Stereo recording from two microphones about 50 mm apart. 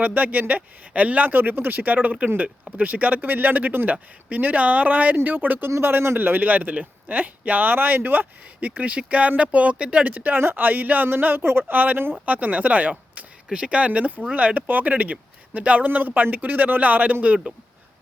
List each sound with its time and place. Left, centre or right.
0.0 s speech: right
5.8 s a man's voice: right
8.7 s speech: right
10.3 s speech: right
13.5 s speech: centre